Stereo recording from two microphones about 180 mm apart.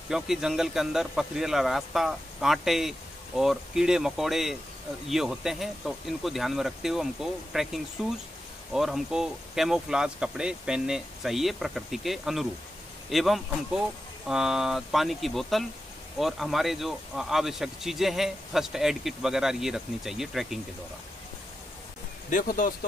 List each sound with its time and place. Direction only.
0.1 s speech: centre (ahead or behind)
22.3 s speech: 50° left (ahead or behind)